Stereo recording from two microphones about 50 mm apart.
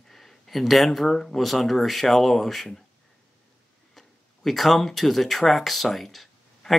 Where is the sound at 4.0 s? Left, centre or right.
Centre.